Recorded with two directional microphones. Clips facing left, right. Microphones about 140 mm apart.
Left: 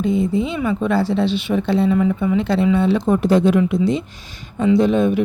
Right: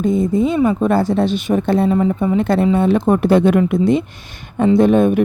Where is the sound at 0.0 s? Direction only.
45° right (ahead or behind).